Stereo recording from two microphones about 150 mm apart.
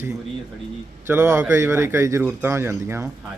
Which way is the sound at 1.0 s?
15° right (ahead or behind).